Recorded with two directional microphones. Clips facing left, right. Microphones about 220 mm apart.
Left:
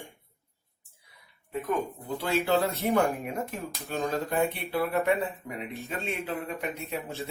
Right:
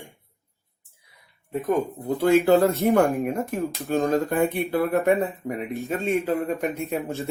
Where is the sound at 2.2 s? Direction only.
50° right (ahead or behind).